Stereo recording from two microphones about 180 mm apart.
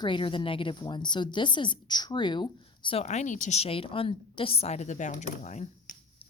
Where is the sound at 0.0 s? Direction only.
25° left (ahead or behind).